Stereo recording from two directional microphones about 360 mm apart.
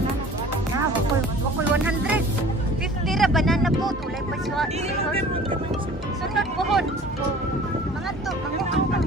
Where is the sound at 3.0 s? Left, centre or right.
Centre.